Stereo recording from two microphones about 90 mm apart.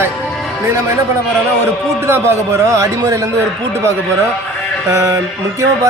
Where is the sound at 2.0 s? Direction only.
30° right (ahead or behind).